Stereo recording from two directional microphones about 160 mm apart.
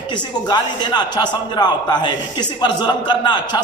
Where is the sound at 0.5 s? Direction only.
25° left (ahead or behind).